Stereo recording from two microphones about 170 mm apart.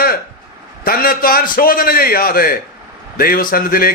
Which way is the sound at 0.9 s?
60° left (ahead or behind).